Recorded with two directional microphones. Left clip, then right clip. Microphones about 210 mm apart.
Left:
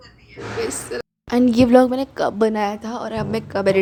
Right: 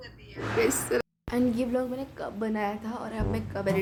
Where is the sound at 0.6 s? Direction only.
25° right (ahead or behind).